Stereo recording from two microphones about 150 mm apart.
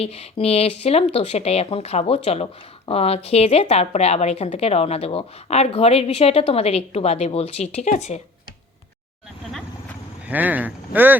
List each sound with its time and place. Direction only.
0.0 s speech: 45° left (ahead or behind)
10.2 s speech: 10° right (ahead or behind)